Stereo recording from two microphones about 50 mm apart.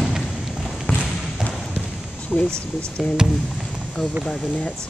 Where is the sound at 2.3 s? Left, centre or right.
Left.